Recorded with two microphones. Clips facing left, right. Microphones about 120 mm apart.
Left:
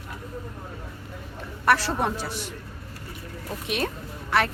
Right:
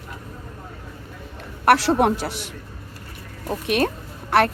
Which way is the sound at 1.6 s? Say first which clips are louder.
Right 6 dB; 75° right (ahead or behind).